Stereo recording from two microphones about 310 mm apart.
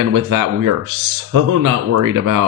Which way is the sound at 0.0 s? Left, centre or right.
Right.